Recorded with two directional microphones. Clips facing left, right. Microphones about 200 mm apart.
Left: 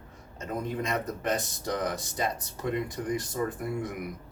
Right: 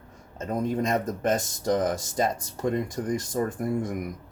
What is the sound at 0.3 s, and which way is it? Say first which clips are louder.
Speech: right 6 dB; 45° right (ahead or behind).